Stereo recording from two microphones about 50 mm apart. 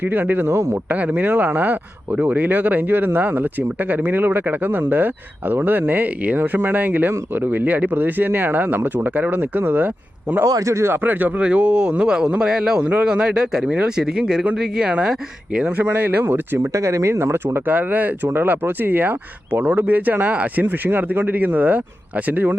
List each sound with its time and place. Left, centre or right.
0.0 s speech: right
0.5 s speech: right
0.9 s speech: right
10.4 s speech: right
10.9 s speech: right
11.3 s speech: right
15.8 s speech: right
16.7 s speech: right
17.7 s speech: right